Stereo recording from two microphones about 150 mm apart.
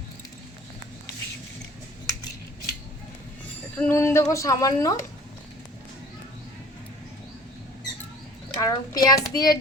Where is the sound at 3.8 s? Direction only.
15° left (ahead or behind).